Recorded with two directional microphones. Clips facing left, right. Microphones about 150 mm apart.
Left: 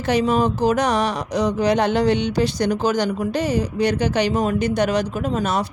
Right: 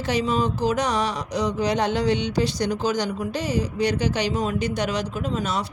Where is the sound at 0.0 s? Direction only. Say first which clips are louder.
Left 4 dB; 55° left (ahead or behind).